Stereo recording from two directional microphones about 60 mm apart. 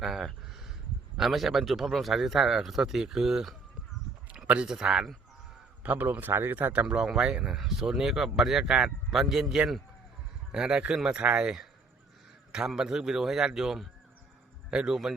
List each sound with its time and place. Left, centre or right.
0.0 s a sound: centre
1.1 s speech: centre
4.6 s speech: centre
5.8 s speech: right
6.8 s a man's voice: centre